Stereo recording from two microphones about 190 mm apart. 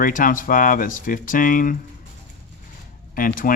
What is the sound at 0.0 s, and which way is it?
Speech, 45° left (ahead or behind).